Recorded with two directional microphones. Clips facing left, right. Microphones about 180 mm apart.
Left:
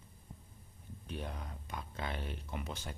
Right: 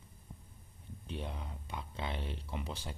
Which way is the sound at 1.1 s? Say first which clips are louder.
Right 1 dB; 25° right (ahead or behind).